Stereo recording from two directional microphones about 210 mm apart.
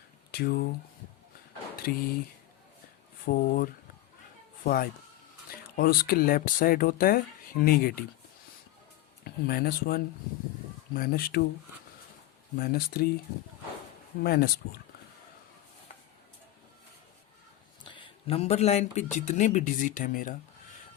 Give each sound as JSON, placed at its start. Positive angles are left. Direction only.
{"t": 0.3, "sound": "speech", "side_deg": 50}
{"t": 1.8, "sound": "speech", "side_deg": 45}
{"t": 3.2, "sound": "speech", "side_deg": 40}
{"t": 9.2, "sound": "speech", "side_deg": 45}
{"t": 12.5, "sound": "speech", "side_deg": 45}
{"t": 14.2, "sound": "speech", "side_deg": 45}
{"t": 17.8, "sound": "speech", "side_deg": 25}